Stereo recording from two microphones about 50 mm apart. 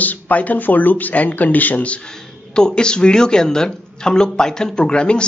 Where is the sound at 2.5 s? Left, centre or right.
Centre.